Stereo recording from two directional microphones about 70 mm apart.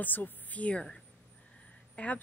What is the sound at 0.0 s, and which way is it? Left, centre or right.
Speech, left.